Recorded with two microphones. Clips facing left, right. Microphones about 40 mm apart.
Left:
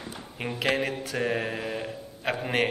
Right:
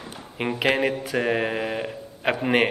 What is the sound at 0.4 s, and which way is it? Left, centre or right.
A man's voice, right.